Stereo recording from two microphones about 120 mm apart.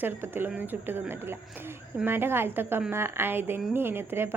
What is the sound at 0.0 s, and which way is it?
A woman's voice, 15° right (ahead or behind).